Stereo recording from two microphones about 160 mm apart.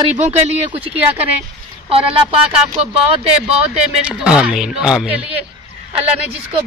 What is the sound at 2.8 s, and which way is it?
Speech, 35° right (ahead or behind).